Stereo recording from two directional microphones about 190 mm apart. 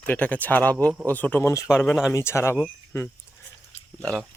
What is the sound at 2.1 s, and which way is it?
Speech, 15° left (ahead or behind).